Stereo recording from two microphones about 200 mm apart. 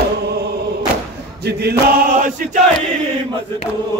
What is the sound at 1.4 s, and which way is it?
Chant, 55° right (ahead or behind).